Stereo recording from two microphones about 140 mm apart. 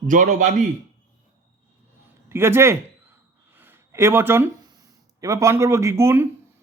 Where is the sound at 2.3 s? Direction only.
20° right (ahead or behind).